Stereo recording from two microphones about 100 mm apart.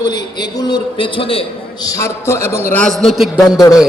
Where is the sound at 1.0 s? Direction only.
60° left (ahead or behind).